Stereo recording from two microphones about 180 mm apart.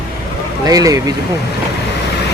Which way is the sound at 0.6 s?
20° right (ahead or behind).